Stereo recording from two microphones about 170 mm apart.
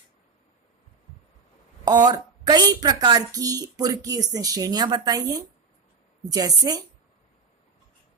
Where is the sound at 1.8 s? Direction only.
20° right (ahead or behind).